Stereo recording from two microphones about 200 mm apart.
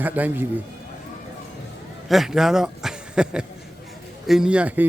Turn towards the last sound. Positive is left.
turn(degrees=-10)  # may be behind; listen again after turning